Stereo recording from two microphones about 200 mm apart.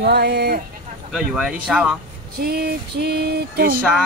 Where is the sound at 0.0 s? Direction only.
55° right (ahead or behind).